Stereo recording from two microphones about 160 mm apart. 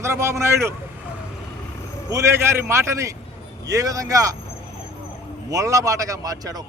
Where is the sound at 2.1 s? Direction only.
15° right (ahead or behind).